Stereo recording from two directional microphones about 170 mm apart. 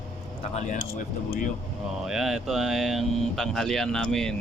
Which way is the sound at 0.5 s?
45° left (ahead or behind).